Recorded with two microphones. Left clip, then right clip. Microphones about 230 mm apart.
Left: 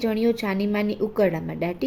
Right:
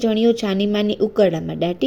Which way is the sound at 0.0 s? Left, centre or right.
Centre.